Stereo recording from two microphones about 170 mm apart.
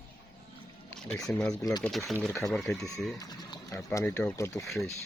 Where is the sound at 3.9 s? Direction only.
15° left (ahead or behind).